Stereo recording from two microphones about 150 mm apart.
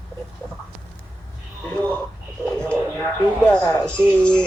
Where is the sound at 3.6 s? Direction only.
25° left (ahead or behind).